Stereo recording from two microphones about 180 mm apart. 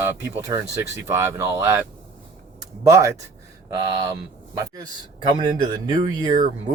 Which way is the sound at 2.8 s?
15° right (ahead or behind).